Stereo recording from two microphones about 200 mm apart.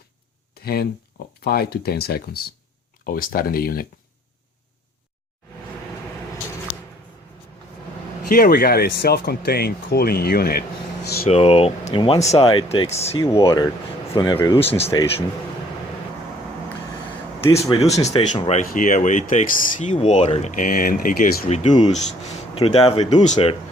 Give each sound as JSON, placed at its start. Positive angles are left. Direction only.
{"t": 0.6, "sound": "speech", "side_deg": 50}
{"t": 8.3, "sound": "speech", "side_deg": 50}
{"t": 11.3, "sound": "speech", "side_deg": 30}
{"t": 13.4, "sound": "speech", "side_deg": 20}
{"t": 17.4, "sound": "speech", "side_deg": 15}
{"t": 18.0, "sound": "speech", "side_deg": 30}
{"t": 18.6, "sound": "speech", "side_deg": 45}